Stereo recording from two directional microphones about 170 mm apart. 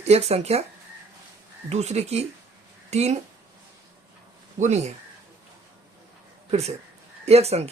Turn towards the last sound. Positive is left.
turn(degrees=-40)  # may be behind; listen again after turning